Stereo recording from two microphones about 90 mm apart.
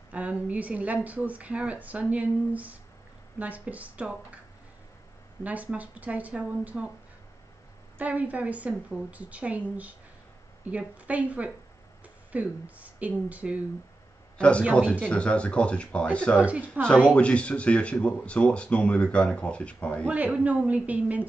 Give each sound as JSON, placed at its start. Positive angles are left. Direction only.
{"t": 0.1, "sound": "a woman's voice", "side_deg": -15}
{"t": 5.4, "sound": "a woman's voice", "side_deg": -15}
{"t": 8.0, "sound": "a woman's voice", "side_deg": -15}
{"t": 14.7, "sound": "speech", "side_deg": 10}
{"t": 16.3, "sound": "a woman's voice", "side_deg": -15}
{"t": 17.1, "sound": "speech", "side_deg": 15}
{"t": 20.1, "sound": "a woman's voice", "side_deg": -15}